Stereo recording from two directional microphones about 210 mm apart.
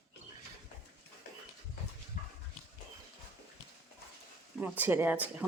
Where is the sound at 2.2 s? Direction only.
40° left (ahead or behind).